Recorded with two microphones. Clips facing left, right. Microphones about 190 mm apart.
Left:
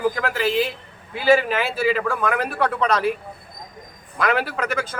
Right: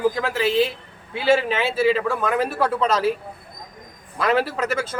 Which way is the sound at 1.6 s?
Centre (ahead or behind).